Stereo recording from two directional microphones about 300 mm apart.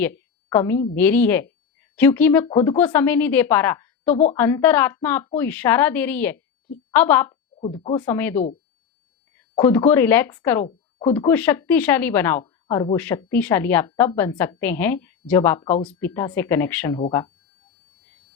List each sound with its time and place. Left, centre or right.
0.0 s a sound: centre
0.9 s a woman's voice: centre
4.1 s a woman's voice: left
4.4 s a woman's voice: centre
9.6 s a woman's voice: centre